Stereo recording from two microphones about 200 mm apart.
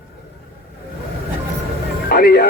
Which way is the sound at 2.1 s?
50° left (ahead or behind).